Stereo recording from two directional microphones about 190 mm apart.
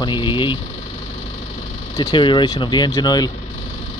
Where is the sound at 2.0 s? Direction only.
25° left (ahead or behind).